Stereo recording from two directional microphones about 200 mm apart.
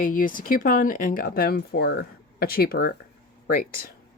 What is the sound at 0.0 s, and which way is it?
Speech, 40° left (ahead or behind).